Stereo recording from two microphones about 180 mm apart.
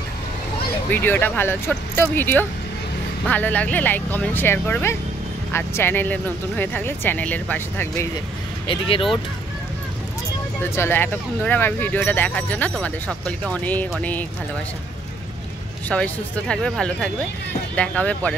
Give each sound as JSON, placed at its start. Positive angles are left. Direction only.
{"t": 0.8, "sound": "speech", "side_deg": 10}
{"t": 8.6, "sound": "speech", "side_deg": 30}
{"t": 10.7, "sound": "speech", "side_deg": 10}
{"t": 15.9, "sound": "speech", "side_deg": 5}